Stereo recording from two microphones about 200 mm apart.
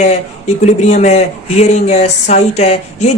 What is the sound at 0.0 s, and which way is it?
Speech, 35° left (ahead or behind).